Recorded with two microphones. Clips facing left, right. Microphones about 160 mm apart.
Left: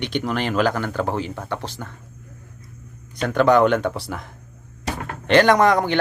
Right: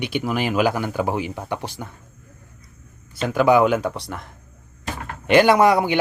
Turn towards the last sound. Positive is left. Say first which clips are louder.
# right 1 dB
turn(degrees=-10)  # may be behind; listen again after turning